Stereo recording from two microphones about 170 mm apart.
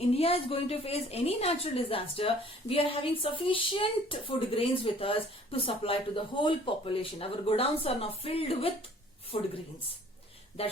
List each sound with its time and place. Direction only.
0.1 s a woman's voice: 35° left (ahead or behind)
10.6 s a woman's voice: 35° left (ahead or behind)